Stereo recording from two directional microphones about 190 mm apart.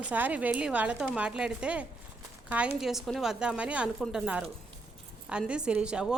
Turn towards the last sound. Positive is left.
turn(degrees=-5)  # may be behind; listen again after turning